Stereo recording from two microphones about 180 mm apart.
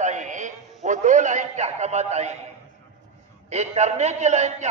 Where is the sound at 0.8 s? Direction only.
45° right (ahead or behind).